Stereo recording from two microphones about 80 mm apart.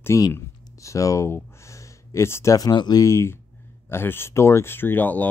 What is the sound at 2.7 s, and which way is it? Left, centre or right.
Speech, left.